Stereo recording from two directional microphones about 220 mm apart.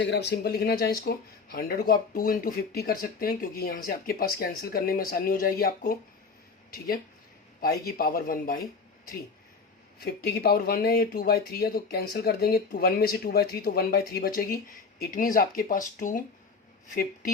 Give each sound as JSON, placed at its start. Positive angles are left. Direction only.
{"t": 0.0, "sound": "speech", "side_deg": 50}
{"t": 7.9, "sound": "speech", "side_deg": 45}
{"t": 10.0, "sound": "speech", "side_deg": 45}